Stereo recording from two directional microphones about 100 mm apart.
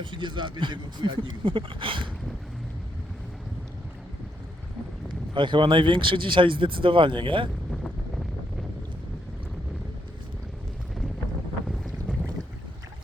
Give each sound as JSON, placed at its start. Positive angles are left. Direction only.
{"t": 0.0, "sound": "speech", "side_deg": -55}
{"t": 5.0, "sound": "speech", "side_deg": -55}